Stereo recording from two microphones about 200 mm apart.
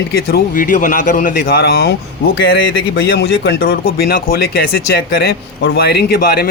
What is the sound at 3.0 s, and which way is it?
Speech, 55° left (ahead or behind).